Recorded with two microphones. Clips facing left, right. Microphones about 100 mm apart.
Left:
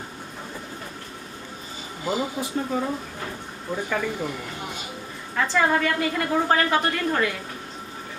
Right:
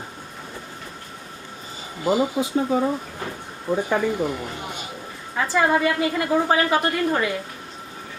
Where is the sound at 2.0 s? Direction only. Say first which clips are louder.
Right 6 dB; 15° right (ahead or behind).